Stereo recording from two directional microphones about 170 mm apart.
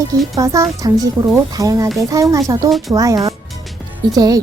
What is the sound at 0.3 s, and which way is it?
A woman's voice, 20° right (ahead or behind).